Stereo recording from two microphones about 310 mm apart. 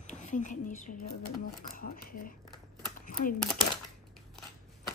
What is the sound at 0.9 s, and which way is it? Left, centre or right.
Speech, left.